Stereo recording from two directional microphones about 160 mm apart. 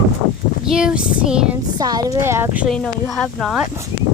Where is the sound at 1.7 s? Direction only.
25° right (ahead or behind).